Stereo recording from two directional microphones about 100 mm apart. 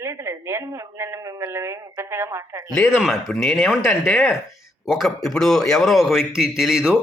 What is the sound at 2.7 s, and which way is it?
A man's voice, 5° left (ahead or behind).